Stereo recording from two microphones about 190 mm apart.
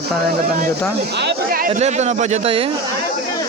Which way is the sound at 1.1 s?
60° right (ahead or behind).